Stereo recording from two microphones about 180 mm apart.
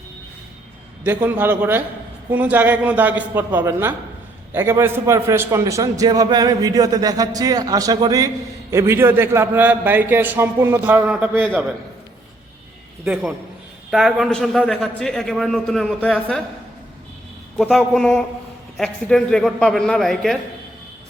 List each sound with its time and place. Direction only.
1.0 s a man's voice: 10° right (ahead or behind)
13.9 s a man's voice: centre (ahead or behind)
17.6 s a man's voice: centre (ahead or behind)